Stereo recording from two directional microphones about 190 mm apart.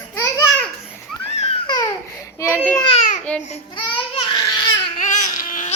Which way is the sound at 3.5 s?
25° left (ahead or behind).